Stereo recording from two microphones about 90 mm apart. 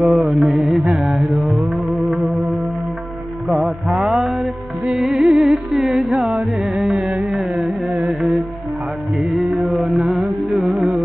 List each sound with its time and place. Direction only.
0.0 s mantra: 5° right (ahead or behind)
3.4 s music: centre (ahead or behind)